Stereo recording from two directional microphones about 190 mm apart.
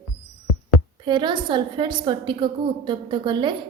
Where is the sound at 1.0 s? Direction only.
25° right (ahead or behind).